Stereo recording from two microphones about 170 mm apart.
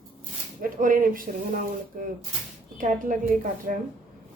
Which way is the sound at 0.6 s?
55° right (ahead or behind).